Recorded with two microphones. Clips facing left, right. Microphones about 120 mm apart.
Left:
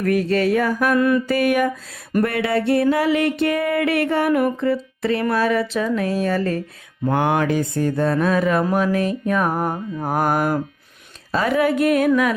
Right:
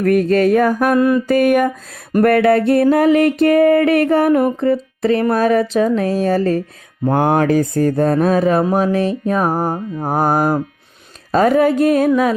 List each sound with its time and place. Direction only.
0.0 s mantra: 50° right (ahead or behind)
0.9 s mantra: 30° right (ahead or behind)
1.3 s mantra: 45° right (ahead or behind)
2.2 s a sound: 55° right (ahead or behind); by 12.3 s 30° right (ahead or behind)